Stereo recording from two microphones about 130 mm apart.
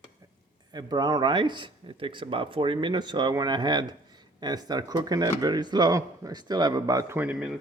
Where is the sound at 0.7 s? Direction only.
30° right (ahead or behind).